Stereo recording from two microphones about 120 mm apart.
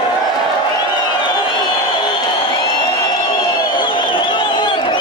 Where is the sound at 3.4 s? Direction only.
35° left (ahead or behind).